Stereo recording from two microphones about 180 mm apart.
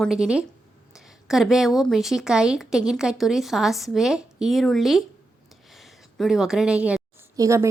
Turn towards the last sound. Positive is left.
turn(degrees=-15)  # may be behind; listen again after turning